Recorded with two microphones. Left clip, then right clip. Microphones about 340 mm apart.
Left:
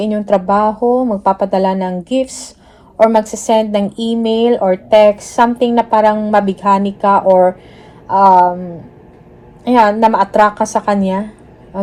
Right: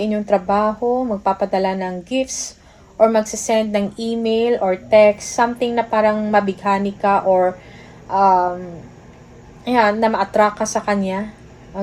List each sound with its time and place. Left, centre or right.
0.0 s a woman's voice: left
0.8 s speech: left
1.2 s a woman's voice: left
9.6 s a woman's voice: left